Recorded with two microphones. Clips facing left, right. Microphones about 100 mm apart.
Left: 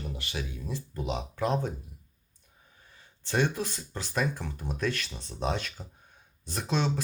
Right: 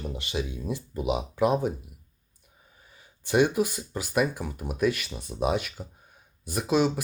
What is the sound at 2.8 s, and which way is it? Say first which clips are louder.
Speech: right 1 dB; 10° right (ahead or behind).